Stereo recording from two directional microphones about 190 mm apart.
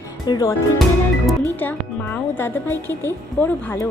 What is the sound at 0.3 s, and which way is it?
Speech, 20° left (ahead or behind).